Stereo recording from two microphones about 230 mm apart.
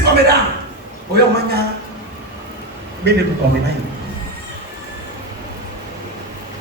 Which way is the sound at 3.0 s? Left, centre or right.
Right.